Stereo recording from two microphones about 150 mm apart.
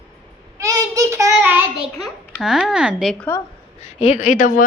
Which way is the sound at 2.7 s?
5° right (ahead or behind).